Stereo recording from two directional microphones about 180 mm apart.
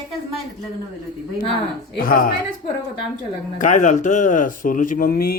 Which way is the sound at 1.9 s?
50° left (ahead or behind).